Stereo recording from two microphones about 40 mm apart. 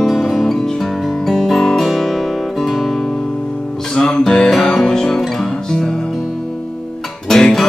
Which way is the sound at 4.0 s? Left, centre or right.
Centre.